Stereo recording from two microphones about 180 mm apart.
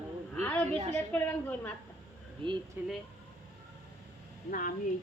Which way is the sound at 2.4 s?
30° right (ahead or behind).